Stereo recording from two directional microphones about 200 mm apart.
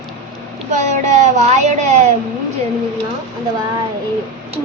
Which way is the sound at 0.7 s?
35° right (ahead or behind).